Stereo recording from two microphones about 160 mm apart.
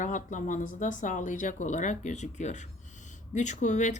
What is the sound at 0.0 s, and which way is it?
Cutlery, 50° left (ahead or behind).